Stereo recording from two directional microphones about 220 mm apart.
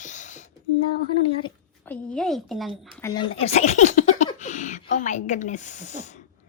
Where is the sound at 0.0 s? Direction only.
35° left (ahead or behind).